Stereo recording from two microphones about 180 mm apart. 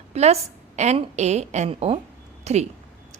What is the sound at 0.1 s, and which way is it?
A woman's voice, 35° right (ahead or behind).